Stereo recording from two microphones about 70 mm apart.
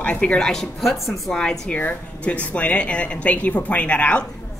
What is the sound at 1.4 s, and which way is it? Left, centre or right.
Speech, centre.